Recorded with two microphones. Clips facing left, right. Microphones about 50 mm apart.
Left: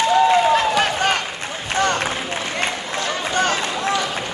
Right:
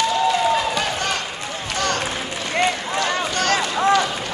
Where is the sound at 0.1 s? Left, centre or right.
Left.